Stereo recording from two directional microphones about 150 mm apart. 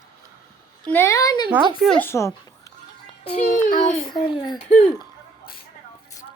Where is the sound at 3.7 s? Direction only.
55° left (ahead or behind).